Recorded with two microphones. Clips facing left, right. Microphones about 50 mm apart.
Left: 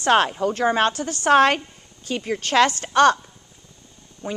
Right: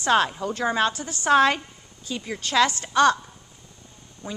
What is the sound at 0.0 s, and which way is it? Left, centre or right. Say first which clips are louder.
A woman's voice: left 3 dB; left.